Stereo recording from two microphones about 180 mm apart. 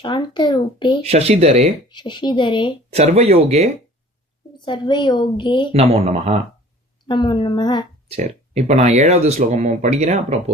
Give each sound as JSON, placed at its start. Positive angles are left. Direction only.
{"t": 0.0, "sound": "a woman's voice", "side_deg": 25}
{"t": 1.0, "sound": "speech", "side_deg": -35}
{"t": 1.9, "sound": "a woman's voice", "side_deg": 25}
{"t": 2.9, "sound": "speech", "side_deg": -35}
{"t": 4.5, "sound": "a woman's voice", "side_deg": 25}
{"t": 5.7, "sound": "speech", "side_deg": -35}
{"t": 7.1, "sound": "a woman's voice", "side_deg": 25}
{"t": 8.1, "sound": "speech", "side_deg": -35}